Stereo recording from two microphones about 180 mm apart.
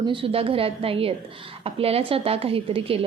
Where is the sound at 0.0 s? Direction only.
30° right (ahead or behind).